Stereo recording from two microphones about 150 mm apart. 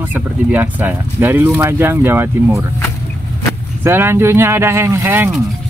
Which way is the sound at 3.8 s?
15° right (ahead or behind).